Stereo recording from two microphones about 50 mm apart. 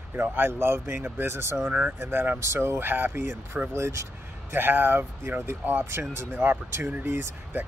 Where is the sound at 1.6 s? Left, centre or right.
Right.